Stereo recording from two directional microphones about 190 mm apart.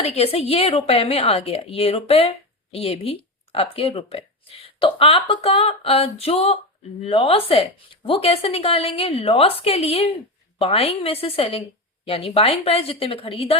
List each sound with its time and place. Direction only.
0.0 s a woman's voice: 35° left (ahead or behind)